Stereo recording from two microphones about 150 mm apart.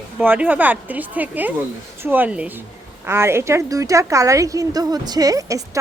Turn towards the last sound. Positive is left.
turn(degrees=-25)  # may be behind; listen again after turning